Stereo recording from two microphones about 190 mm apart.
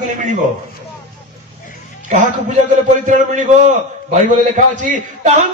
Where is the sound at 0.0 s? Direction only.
40° right (ahead or behind).